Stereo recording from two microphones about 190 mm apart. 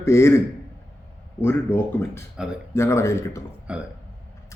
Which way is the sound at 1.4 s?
10° left (ahead or behind).